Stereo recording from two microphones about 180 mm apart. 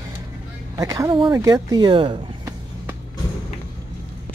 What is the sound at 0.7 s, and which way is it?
Speech, 20° right (ahead or behind).